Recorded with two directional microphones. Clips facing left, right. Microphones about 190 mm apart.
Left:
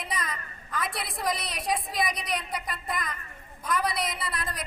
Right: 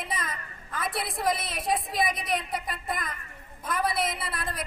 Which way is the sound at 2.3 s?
25° right (ahead or behind).